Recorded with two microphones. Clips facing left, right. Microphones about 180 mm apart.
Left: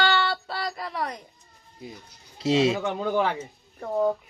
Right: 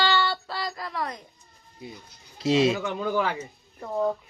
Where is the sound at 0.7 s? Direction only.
25° left (ahead or behind).